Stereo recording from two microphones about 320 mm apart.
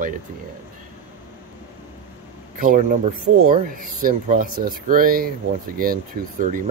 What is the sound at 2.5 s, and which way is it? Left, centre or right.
Speech, right.